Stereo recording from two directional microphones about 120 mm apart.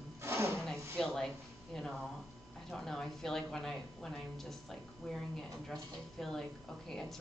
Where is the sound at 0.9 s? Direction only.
5° left (ahead or behind).